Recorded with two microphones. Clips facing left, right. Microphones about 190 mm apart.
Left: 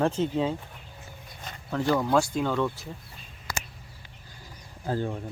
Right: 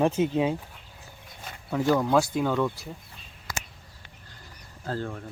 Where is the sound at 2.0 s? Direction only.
Centre (ahead or behind).